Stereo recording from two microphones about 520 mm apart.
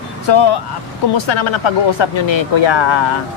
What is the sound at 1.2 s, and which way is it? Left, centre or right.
Speech, left.